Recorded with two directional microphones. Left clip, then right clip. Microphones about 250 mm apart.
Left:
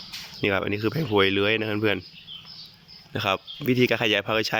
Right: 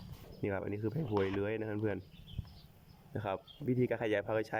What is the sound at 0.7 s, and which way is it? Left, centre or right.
Speech, centre.